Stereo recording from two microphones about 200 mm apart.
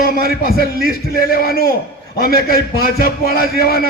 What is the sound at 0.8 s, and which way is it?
Music, 50° left (ahead or behind).